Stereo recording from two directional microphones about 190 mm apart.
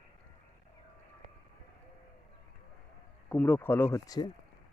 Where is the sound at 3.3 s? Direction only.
10° left (ahead or behind).